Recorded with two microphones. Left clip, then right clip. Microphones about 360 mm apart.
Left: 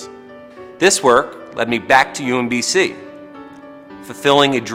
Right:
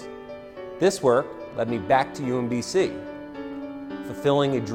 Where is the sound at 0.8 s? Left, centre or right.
Right.